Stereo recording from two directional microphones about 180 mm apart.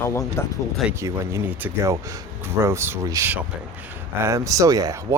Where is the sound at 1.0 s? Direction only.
15° right (ahead or behind).